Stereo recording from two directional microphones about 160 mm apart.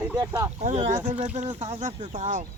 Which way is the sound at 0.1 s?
20° right (ahead or behind).